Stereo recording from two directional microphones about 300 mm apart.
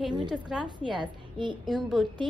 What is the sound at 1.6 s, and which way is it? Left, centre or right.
Speech, centre.